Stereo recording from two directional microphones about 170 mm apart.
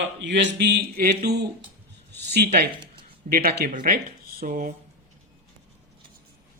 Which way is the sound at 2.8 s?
30° right (ahead or behind).